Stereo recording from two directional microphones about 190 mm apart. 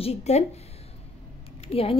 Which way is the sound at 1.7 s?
30° left (ahead or behind).